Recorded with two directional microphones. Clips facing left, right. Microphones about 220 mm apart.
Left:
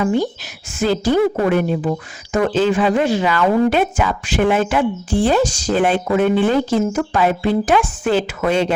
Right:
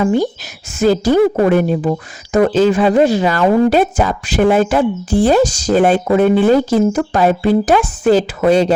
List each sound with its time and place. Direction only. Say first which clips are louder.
0.0 s speech: right 3 dB; 40° right (ahead or behind)